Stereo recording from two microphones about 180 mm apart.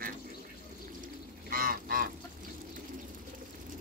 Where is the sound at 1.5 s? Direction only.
55° right (ahead or behind).